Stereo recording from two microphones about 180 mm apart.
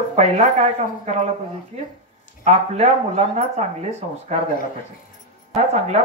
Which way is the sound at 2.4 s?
40° right (ahead or behind).